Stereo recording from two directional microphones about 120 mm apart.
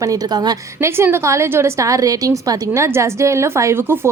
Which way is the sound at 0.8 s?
20° right (ahead or behind).